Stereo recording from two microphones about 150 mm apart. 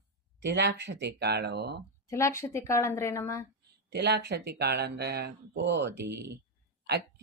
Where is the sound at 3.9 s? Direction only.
90° right.